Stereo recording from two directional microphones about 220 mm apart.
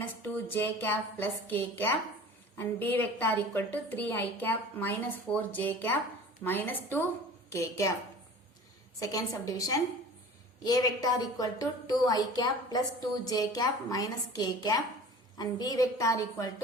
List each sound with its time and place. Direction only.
0.2 s a woman's voice: 10° left (ahead or behind)
9.0 s a woman's voice: 15° left (ahead or behind)